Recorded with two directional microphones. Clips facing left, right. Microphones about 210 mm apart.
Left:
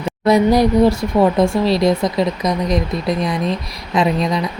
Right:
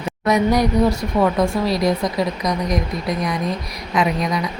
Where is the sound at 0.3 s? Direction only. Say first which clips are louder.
Left 4 dB; 30° left (ahead or behind).